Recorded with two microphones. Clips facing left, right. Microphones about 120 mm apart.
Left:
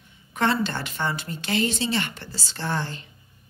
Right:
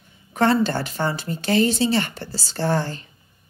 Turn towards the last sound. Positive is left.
turn(degrees=-40)  # may be behind; listen again after turning